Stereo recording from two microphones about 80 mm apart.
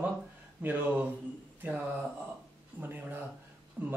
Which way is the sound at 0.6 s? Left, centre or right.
Right.